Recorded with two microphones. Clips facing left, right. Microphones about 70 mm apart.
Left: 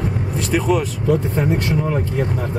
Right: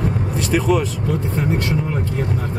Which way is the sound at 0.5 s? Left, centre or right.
Centre.